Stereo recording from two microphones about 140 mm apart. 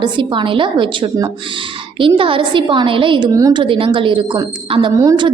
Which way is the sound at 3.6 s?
40° right (ahead or behind).